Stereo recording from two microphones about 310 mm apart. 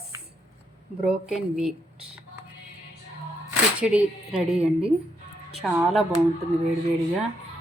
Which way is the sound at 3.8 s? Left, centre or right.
Centre.